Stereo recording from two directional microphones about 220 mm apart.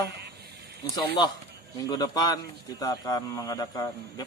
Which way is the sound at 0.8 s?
20° left (ahead or behind).